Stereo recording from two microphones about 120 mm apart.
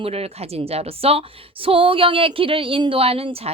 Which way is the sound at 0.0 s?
60° right (ahead or behind).